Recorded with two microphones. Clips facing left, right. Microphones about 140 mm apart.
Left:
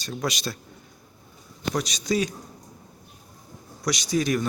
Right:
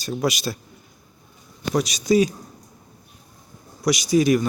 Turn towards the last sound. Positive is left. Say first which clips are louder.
# right 7 dB
turn(degrees=-5)  # may be behind; listen again after turning